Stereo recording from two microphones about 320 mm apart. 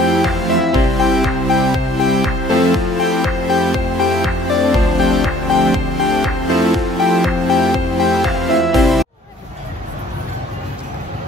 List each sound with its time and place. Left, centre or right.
0.0 s music: centre